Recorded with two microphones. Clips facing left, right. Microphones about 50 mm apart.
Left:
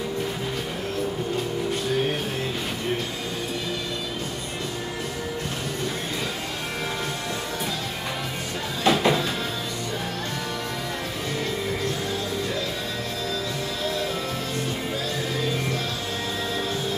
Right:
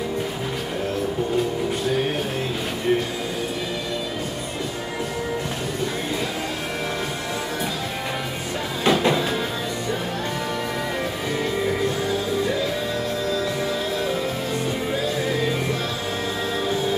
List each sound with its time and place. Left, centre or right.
8.8 s music: centre